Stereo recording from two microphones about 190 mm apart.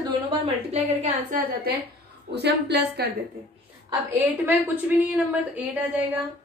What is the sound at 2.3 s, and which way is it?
Speech, 60° right (ahead or behind).